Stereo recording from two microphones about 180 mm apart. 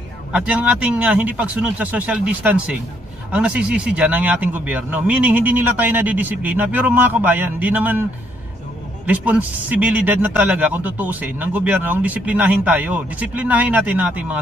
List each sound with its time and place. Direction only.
0.3 s speech: 5° right (ahead or behind)
9.0 s speech: 10° right (ahead or behind)